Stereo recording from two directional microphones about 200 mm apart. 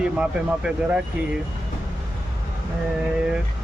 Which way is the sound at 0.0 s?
5° right (ahead or behind).